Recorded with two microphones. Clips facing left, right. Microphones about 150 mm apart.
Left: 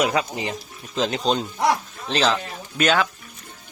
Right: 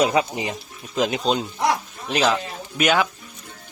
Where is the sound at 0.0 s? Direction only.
20° right (ahead or behind).